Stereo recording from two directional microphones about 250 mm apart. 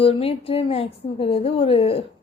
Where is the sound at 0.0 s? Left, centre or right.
Left.